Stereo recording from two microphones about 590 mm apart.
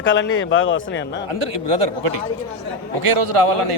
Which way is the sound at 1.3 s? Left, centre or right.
Right.